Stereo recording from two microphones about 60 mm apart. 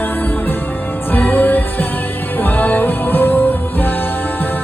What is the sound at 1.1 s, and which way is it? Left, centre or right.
Music, left.